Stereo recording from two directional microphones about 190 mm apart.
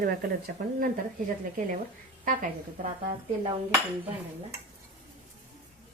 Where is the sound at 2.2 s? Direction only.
45° right (ahead or behind).